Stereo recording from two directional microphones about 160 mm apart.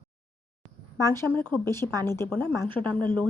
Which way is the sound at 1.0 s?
15° left (ahead or behind).